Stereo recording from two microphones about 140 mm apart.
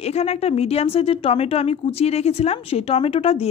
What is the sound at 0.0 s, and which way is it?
Speech, 50° left (ahead or behind).